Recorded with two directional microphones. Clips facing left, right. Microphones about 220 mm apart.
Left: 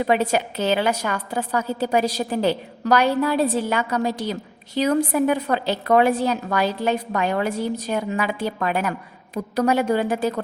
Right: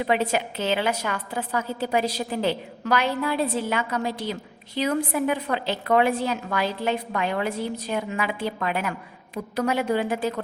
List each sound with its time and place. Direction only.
0.0 s a woman's voice: 40° left (ahead or behind)